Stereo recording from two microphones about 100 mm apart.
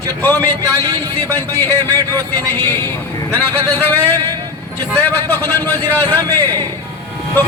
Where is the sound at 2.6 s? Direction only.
20° left (ahead or behind).